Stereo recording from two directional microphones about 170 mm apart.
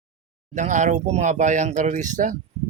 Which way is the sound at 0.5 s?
45° right (ahead or behind).